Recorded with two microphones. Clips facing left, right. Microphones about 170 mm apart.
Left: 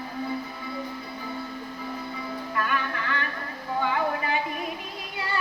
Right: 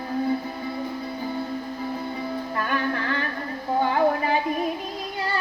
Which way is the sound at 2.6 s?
35° right (ahead or behind).